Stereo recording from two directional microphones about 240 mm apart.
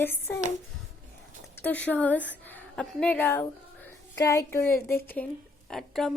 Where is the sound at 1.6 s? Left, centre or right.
Centre.